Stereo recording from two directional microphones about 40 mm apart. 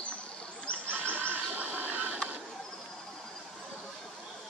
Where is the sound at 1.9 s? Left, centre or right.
Right.